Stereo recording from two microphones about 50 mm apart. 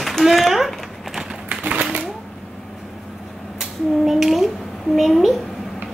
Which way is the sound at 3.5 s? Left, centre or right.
Centre.